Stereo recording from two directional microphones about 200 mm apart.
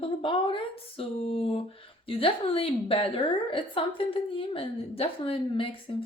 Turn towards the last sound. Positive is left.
turn(degrees=25)  # may be behind; listen again after turning